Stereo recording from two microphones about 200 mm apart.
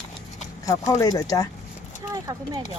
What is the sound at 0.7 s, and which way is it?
Speech, 15° left (ahead or behind).